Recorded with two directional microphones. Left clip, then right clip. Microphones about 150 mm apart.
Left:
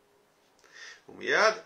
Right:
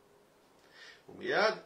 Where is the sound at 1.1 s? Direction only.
15° left (ahead or behind).